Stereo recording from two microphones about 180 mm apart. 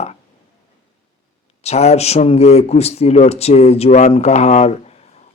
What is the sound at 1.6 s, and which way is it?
Speech, 35° left (ahead or behind).